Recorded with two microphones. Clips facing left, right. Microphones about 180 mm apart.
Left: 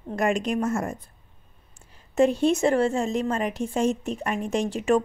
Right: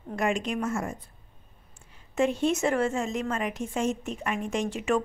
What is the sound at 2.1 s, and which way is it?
A woman's voice, 35° left (ahead or behind).